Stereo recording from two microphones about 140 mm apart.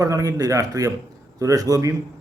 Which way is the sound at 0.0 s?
25° right (ahead or behind).